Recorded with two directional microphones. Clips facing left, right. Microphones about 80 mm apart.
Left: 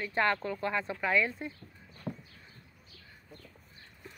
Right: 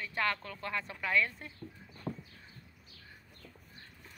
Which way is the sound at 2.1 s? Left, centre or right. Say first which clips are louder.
Even; centre.